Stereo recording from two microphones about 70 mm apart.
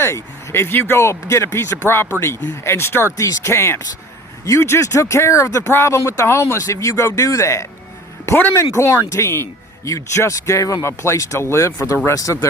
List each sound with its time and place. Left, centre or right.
0.0 s speech: left
3.2 s speech: left